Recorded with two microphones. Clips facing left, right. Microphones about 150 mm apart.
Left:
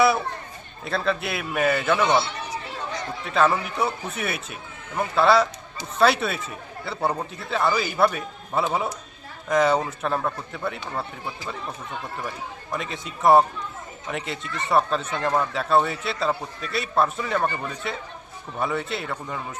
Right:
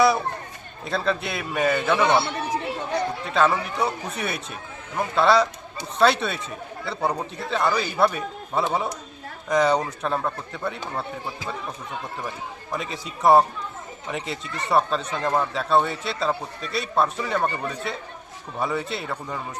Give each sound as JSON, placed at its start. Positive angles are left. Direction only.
{"t": 0.9, "sound": "speech", "side_deg": 0}
{"t": 2.0, "sound": "chatter", "side_deg": -60}
{"t": 3.2, "sound": "speech", "side_deg": 0}
{"t": 12.7, "sound": "speech", "side_deg": 0}